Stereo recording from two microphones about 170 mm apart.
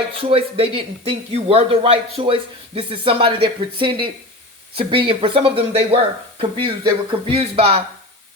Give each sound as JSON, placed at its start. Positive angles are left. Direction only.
{"t": 0.2, "sound": "speech", "side_deg": -35}